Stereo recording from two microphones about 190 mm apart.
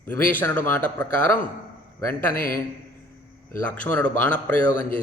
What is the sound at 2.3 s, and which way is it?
Speech, 50° left (ahead or behind).